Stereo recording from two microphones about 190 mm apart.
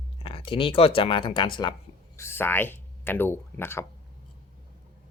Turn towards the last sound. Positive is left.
turn(degrees=10)  # may be behind; listen again after turning